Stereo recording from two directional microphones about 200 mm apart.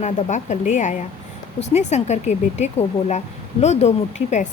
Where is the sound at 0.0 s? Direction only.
35° left (ahead or behind).